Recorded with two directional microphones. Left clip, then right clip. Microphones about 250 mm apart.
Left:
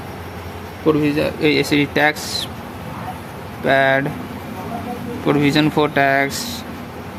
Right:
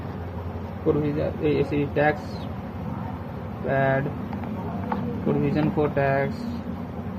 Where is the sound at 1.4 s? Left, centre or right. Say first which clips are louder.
Left 7 dB; left.